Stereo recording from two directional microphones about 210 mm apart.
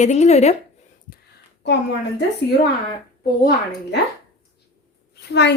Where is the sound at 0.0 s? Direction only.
35° left (ahead or behind).